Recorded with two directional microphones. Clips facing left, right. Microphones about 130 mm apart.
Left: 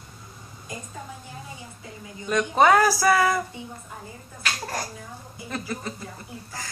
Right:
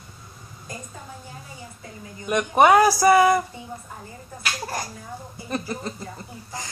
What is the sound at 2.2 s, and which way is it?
Speech, 15° right (ahead or behind).